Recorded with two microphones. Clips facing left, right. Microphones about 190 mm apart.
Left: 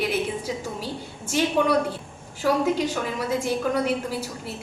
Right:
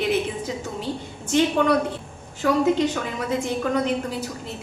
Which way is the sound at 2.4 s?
10° left (ahead or behind).